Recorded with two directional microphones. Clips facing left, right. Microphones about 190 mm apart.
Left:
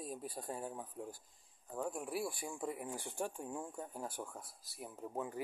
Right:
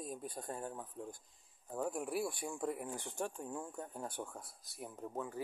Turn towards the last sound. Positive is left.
turn(degrees=15)  # may be behind; listen again after turning